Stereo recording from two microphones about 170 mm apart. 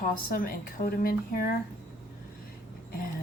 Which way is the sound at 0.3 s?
55° left (ahead or behind).